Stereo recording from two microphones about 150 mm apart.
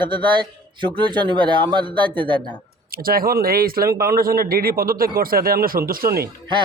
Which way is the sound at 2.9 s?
75° right (ahead or behind).